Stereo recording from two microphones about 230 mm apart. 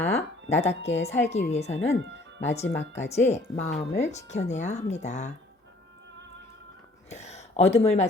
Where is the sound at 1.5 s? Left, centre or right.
Left.